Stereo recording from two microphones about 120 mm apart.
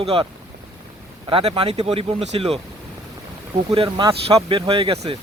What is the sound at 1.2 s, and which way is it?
Speech, 50° right (ahead or behind).